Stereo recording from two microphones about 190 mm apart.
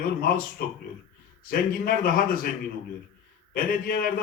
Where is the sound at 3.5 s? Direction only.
50° left (ahead or behind).